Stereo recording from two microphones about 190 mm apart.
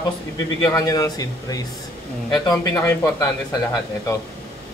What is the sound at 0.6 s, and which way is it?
Speech, 20° left (ahead or behind).